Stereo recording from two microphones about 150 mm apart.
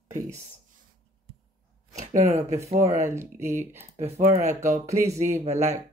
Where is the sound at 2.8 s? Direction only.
20° right (ahead or behind).